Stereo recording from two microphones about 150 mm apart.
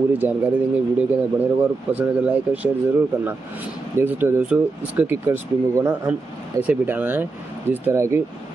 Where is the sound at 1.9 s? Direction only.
10° right (ahead or behind).